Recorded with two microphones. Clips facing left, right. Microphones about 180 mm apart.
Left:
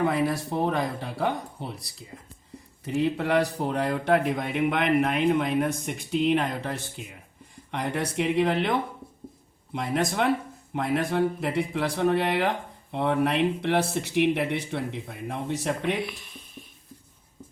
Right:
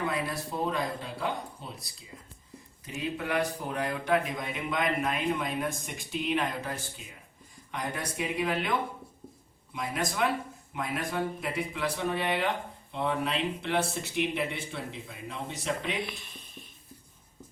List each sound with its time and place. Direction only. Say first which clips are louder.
0.0 s speech: left 7 dB; 65° left (ahead or behind)
2.8 s speech: left 9 dB; 65° left (ahead or behind)
10.8 s speech: left 7 dB; 65° left (ahead or behind)
16.0 s a sound: left 2 dB; 10° left (ahead or behind)